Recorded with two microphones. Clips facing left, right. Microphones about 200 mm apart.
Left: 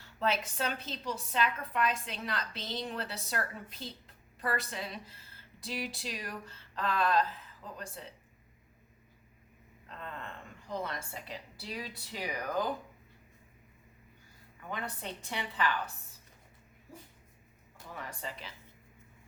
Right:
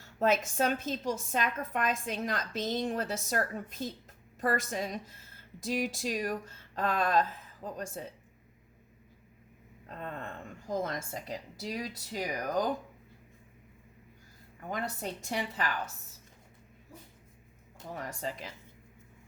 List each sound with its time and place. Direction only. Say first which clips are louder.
0.0 s a woman's voice: right 5 dB; 45° right (ahead or behind)
9.9 s a woman's voice: right 4 dB; 45° right (ahead or behind)
14.7 s a woman's voice: right 4 dB; 40° right (ahead or behind)
17.9 s a woman's voice: right 5 dB; 40° right (ahead or behind)